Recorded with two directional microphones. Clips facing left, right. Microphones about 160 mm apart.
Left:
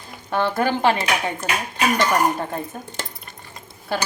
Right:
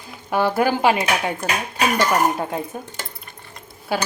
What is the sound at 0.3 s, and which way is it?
Speech, 10° right (ahead or behind).